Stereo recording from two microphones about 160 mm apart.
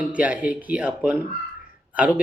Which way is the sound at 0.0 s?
10° right (ahead or behind).